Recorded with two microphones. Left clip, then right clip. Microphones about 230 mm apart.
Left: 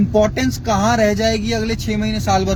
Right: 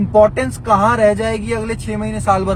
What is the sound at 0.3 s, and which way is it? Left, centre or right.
Speech, right.